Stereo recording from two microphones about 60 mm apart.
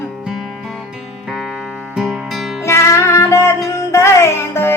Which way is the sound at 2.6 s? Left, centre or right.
Left.